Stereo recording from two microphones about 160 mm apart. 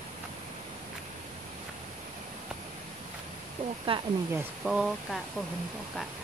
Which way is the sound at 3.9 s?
35° right (ahead or behind).